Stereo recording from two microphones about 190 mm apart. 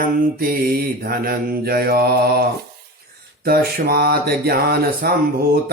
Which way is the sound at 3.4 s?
55° right (ahead or behind).